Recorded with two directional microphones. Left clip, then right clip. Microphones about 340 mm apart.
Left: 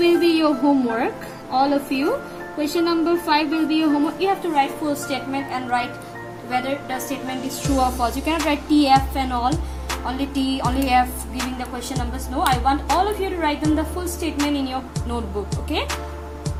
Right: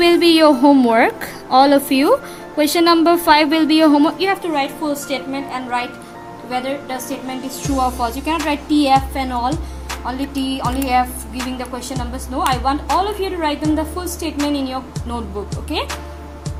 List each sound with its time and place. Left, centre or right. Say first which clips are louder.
0.0 s a woman's voice: right 6 dB; centre